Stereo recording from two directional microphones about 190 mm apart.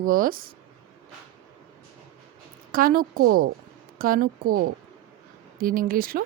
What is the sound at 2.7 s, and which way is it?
Speech, 50° right (ahead or behind).